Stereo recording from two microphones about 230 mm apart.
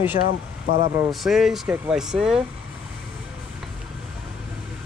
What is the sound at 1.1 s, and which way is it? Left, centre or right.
Speech, centre.